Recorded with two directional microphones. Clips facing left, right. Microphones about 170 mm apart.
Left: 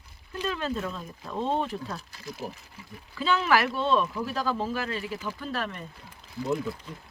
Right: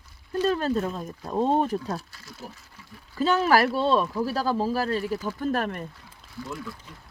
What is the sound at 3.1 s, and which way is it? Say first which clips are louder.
Speech: right 3 dB; 40° right (ahead or behind).